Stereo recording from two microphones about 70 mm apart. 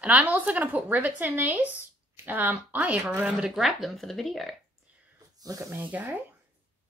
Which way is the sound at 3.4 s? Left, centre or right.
Centre.